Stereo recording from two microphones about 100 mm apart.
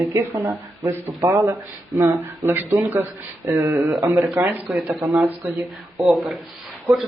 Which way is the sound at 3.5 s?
40° right (ahead or behind).